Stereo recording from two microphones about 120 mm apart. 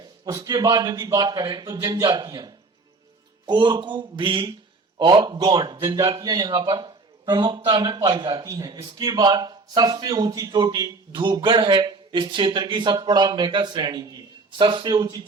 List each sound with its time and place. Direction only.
0.0 s a man's voice: 30° right (ahead or behind)